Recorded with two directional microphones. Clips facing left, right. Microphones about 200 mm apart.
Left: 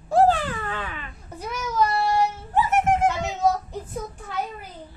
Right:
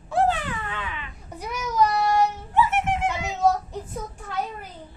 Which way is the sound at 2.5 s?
45° left (ahead or behind).